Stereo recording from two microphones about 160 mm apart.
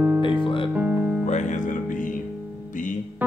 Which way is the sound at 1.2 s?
50° left (ahead or behind).